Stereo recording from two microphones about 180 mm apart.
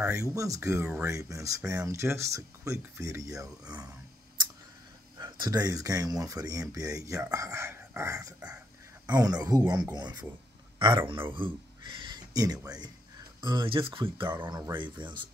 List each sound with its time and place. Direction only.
0.0 s speech: 15° right (ahead or behind)
5.2 s speech: 20° right (ahead or behind)
11.3 s speech: 30° right (ahead or behind)